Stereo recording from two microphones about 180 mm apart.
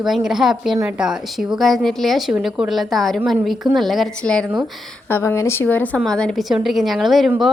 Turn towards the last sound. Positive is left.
turn(degrees=0)  # may be behind; listen again after turning